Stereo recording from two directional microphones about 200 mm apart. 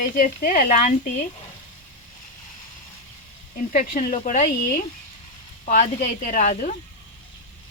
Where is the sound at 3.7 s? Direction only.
40° left (ahead or behind).